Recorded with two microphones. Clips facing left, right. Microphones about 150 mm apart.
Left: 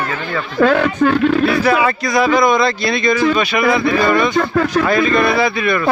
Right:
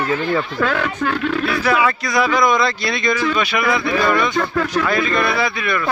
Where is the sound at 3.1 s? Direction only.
30° left (ahead or behind).